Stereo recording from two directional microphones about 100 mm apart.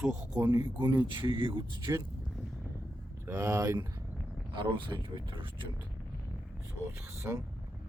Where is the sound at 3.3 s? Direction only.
30° right (ahead or behind).